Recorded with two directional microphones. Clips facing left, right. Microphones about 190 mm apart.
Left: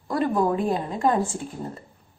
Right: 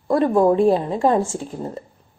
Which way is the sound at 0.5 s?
30° right (ahead or behind).